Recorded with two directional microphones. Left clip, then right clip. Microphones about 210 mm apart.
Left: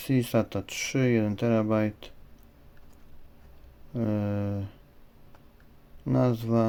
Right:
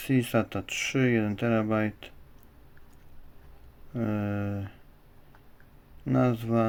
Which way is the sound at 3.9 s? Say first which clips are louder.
Left 1 dB; 15° left (ahead or behind).